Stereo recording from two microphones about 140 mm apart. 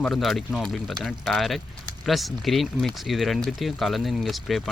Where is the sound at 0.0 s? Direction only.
Centre (ahead or behind).